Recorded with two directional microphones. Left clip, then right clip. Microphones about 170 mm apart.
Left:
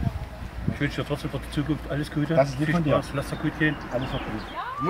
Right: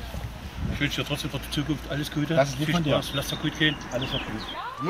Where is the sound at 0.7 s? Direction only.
10° left (ahead or behind).